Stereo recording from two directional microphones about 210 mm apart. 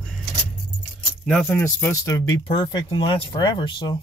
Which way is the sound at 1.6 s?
15° left (ahead or behind).